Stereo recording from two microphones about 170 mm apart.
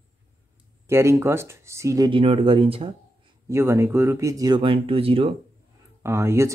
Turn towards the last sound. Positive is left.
turn(degrees=-15)  # may be behind; listen again after turning